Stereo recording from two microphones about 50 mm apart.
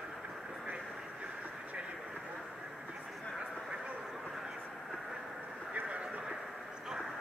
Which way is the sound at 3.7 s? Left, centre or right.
Right.